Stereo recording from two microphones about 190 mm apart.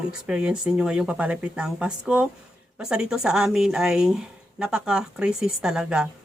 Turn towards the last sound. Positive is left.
turn(degrees=-5)  # may be behind; listen again after turning